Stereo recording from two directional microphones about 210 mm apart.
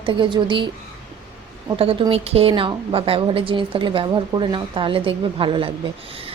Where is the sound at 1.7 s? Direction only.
25° right (ahead or behind).